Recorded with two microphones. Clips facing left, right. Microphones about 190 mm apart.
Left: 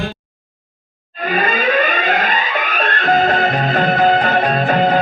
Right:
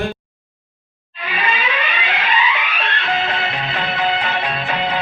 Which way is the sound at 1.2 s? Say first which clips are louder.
Left 6 dB; 45° left (ahead or behind).